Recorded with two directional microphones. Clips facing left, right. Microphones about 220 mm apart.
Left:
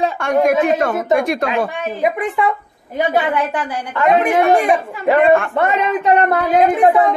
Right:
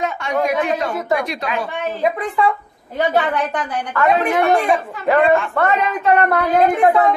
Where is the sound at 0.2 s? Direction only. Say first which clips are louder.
Left 6 dB; 50° left (ahead or behind).